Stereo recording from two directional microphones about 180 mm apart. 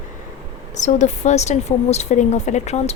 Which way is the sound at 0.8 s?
40° left (ahead or behind).